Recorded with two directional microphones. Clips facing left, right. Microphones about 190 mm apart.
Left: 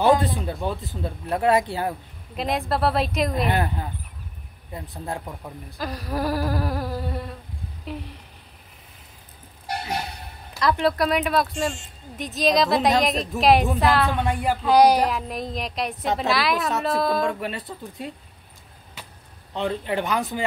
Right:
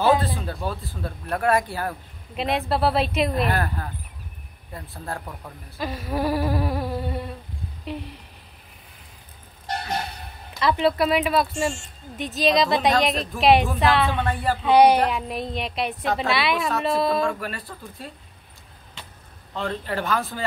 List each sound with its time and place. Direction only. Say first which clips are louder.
0.4 s speech: left 2 dB; 20° left (ahead or behind)
2.3 s insect: right 1 dB; centre (ahead or behind)
3.4 s speech: left 1 dB; 20° left (ahead or behind)
5.8 s insect: right 1 dB; centre (ahead or behind)
7.8 s speech: right 2 dB; centre (ahead or behind)
9.7 s a sound: even; 10° left (ahead or behind)
10.5 s insect: right 1 dB; centre (ahead or behind)
14.3 s speech: left 1 dB; 15° left (ahead or behind)
14.6 s insect: right 1 dB; centre (ahead or behind)
17.3 s speech: left 1 dB; 20° left (ahead or behind)
19.5 s speech: left 3 dB; 15° left (ahead or behind)